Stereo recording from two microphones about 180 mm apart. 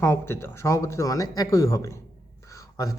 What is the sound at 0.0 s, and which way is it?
A man's voice, 15° left (ahead or behind).